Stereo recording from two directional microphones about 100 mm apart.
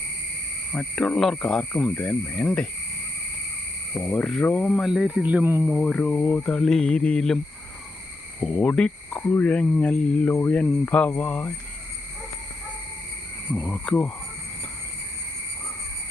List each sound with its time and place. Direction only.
0.7 s speech: 10° left (ahead or behind)
2.0 s speech: 20° left (ahead or behind)
3.9 s speech: 10° left (ahead or behind)
4.7 s speech: centre (ahead or behind); by 5.6 s 20° right (ahead or behind)
5.6 s speech: 5° left (ahead or behind)
8.4 s speech: 5° left (ahead or behind)
13.7 s speech: centre (ahead or behind)